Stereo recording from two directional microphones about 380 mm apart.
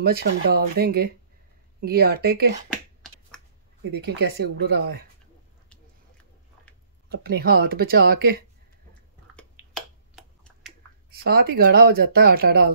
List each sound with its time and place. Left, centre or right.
0.0 s speech: right
3.9 s speech: right
7.1 s speech: right
10.1 s finger snapping: centre
11.1 s speech: right